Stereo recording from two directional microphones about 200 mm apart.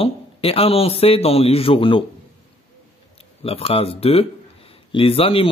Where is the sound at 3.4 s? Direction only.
30° left (ahead or behind).